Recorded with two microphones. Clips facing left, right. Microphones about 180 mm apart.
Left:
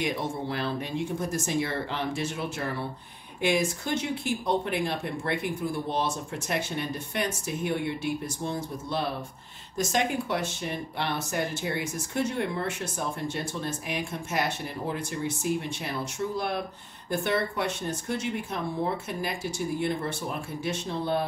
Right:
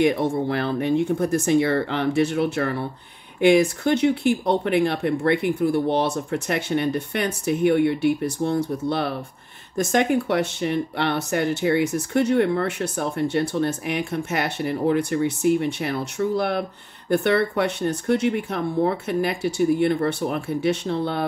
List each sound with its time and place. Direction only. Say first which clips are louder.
0.0 s speech: right 10 dB; 60° right (ahead or behind)